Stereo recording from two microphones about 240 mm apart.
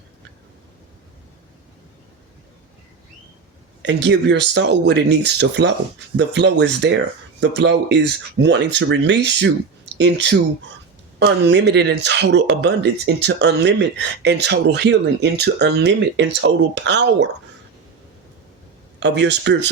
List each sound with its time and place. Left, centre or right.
3.8 s speech: right
18.9 s speech: right